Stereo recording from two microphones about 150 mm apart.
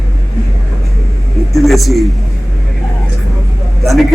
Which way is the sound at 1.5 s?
Centre (ahead or behind).